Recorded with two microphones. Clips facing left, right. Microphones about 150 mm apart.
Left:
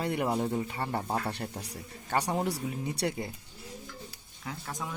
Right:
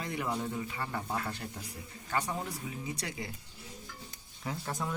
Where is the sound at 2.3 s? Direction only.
60° left (ahead or behind).